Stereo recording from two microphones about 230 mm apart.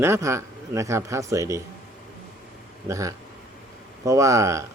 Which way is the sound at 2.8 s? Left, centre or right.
Centre.